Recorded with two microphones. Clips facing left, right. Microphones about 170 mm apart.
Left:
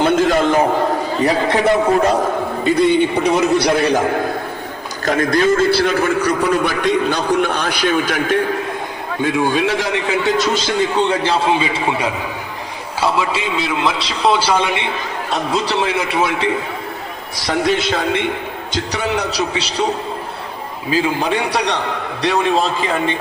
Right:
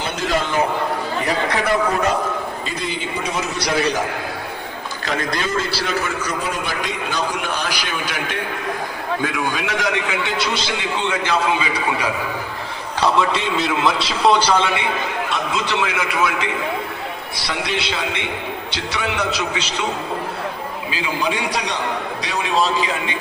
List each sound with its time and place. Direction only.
0.0 s a man's voice: 50° left (ahead or behind)
1.5 s speech: 25° left (ahead or behind)
3.2 s a man's voice: 60° left (ahead or behind)
5.0 s a man's voice: 50° left (ahead or behind)
9.2 s a man's voice: 30° left (ahead or behind)
13.0 s a man's voice: 5° left (ahead or behind)
15.3 s a man's voice: 35° left (ahead or behind)
17.3 s a man's voice: 45° left (ahead or behind)
20.9 s a man's voice: 40° left (ahead or behind)
21.5 s a man's voice: 60° left (ahead or behind)